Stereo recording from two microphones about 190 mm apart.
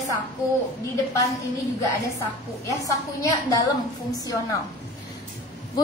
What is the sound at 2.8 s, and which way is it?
Speech, 20° left (ahead or behind).